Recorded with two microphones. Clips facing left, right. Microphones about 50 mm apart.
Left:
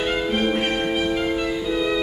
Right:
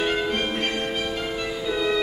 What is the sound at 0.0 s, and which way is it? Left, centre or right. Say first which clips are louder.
Music: left 2 dB; centre.